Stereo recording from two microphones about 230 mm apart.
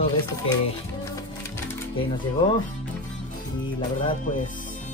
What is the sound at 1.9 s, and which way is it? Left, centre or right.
Speech, left.